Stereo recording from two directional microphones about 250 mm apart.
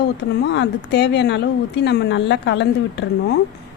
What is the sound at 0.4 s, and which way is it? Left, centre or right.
Speech, left.